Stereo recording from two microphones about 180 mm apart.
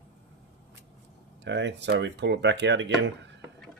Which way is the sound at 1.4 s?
75° right (ahead or behind).